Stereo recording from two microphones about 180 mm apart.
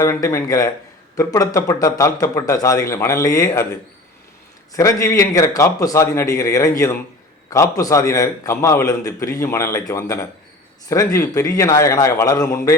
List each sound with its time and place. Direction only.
0.0 s a man's voice: 15° left (ahead or behind)
4.7 s a man's voice: 15° left (ahead or behind)